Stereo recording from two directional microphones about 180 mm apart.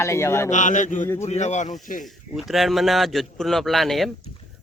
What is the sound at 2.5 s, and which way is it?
A man's voice, centre (ahead or behind).